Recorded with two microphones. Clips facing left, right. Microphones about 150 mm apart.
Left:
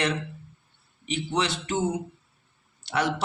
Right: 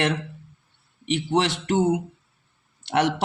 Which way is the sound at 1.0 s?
65° right (ahead or behind).